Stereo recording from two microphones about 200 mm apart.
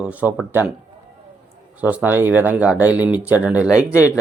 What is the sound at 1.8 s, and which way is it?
Speech, 10° right (ahead or behind).